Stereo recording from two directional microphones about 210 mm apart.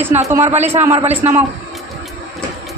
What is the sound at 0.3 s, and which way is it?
Speech, 10° right (ahead or behind).